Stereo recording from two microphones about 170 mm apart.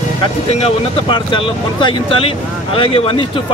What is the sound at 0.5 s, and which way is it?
Speech, 40° left (ahead or behind).